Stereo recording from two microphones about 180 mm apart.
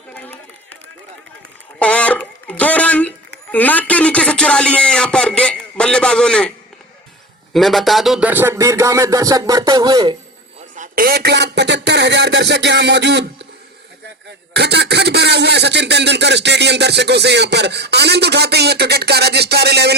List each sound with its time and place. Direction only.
0.1 s run: 10° left (ahead or behind)
1.8 s a sound: 5° left (ahead or behind)
3.5 s a man's voice: 10° left (ahead or behind)
7.5 s music: centre (ahead or behind); by 10.2 s 25° right (ahead or behind)
10.8 s speech: 55° right (ahead or behind); by 13.5 s 75° right (ahead or behind)
14.5 s a sound: 65° right (ahead or behind)